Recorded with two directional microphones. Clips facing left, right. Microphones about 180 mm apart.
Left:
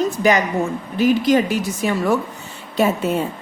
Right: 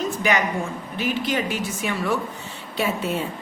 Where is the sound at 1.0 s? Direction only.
40° left (ahead or behind).